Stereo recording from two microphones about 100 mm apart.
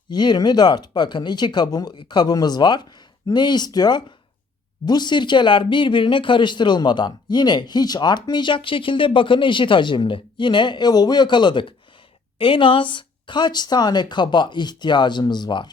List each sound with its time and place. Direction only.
0.1 s speech: 45° left (ahead or behind)